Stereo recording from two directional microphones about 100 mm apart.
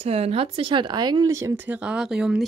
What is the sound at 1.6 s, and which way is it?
Speech, 15° right (ahead or behind).